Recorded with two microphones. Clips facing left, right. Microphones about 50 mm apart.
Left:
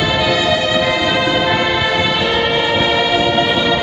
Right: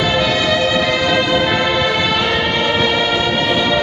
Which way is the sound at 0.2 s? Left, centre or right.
Centre.